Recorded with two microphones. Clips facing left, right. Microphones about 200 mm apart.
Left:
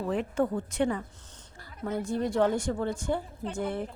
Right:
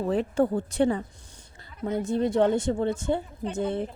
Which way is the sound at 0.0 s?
30° right (ahead or behind).